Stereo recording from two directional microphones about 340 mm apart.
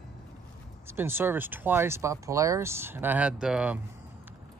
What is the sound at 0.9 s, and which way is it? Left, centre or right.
Speech, centre.